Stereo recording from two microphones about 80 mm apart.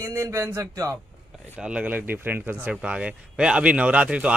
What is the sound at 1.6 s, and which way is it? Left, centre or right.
Speech, centre.